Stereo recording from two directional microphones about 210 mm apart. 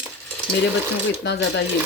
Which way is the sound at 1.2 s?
55° left (ahead or behind).